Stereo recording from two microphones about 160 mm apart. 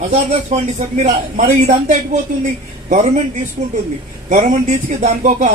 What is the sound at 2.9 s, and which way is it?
Speech, 50° right (ahead or behind).